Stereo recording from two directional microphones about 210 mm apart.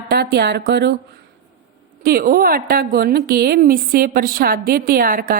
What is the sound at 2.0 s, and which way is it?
A woman's voice, 45° right (ahead or behind).